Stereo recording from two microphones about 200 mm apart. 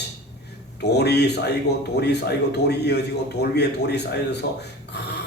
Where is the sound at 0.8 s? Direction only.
55° left (ahead or behind).